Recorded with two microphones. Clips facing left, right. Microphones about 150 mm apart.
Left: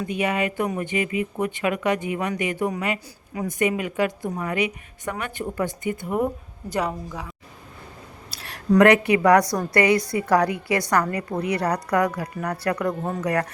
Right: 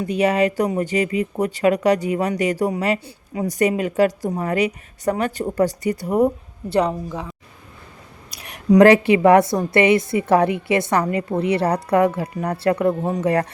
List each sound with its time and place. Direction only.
0.0 s a woman's voice: 40° right (ahead or behind)
6.1 s a woman's voice: 20° right (ahead or behind)
8.3 s a sound: 15° right (ahead or behind)
8.8 s a woman's voice: 30° right (ahead or behind)
13.0 s speech: 10° right (ahead or behind)
13.2 s a woman's voice: 30° right (ahead or behind)